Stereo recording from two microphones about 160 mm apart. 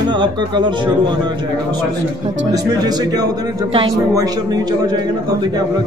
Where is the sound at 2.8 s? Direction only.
25° right (ahead or behind).